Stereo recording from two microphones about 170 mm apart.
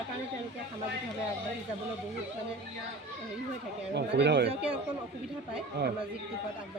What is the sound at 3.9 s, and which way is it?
Speech, 85° right.